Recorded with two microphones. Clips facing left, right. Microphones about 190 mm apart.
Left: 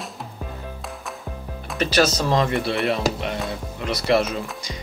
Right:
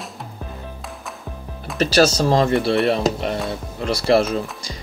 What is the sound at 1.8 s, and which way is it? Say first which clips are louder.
Speech: right 4 dB; 35° right (ahead or behind).